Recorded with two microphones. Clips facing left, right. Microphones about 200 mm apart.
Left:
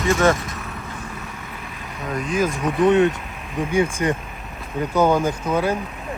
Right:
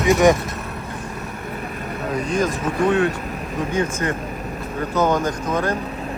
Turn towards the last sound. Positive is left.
turn(degrees=10)  # may be behind; listen again after turning